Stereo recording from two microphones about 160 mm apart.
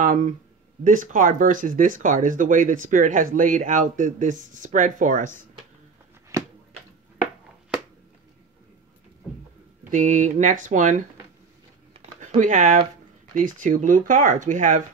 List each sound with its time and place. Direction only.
0.0 s speech: 50° right (ahead or behind)
6.3 s a sound: 20° right (ahead or behind)
9.8 s speech: 50° right (ahead or behind)
12.4 s speech: 50° right (ahead or behind)